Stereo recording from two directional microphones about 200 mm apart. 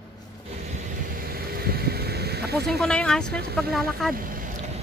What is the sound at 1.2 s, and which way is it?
Vehicle, 50° right (ahead or behind).